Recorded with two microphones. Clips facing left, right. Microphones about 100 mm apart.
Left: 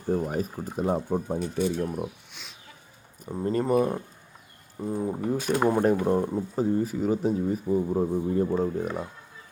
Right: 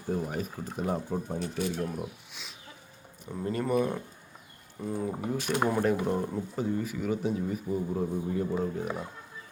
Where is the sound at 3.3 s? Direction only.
25° left (ahead or behind).